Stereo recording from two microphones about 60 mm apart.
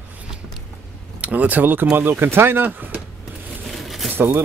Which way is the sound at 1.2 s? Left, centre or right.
Right.